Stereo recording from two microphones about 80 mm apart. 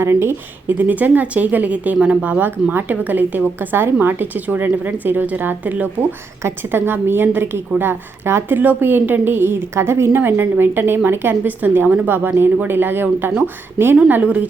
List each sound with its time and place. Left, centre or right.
0.0 s a woman's voice: right